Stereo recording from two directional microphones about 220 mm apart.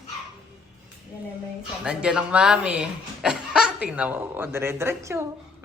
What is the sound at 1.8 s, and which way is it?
Speech, 5° right (ahead or behind).